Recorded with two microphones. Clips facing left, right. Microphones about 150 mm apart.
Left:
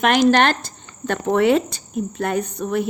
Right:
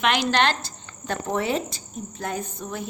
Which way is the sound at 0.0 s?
45° left (ahead or behind).